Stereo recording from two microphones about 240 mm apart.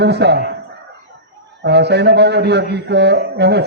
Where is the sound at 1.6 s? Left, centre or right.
Right.